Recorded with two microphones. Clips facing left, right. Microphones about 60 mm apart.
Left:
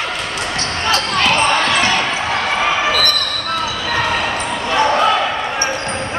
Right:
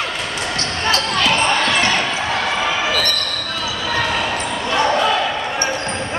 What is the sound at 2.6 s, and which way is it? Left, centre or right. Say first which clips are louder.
Basketball bounce: left 3 dB; left.